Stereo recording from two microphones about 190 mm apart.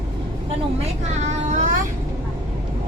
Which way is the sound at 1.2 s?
45° right (ahead or behind).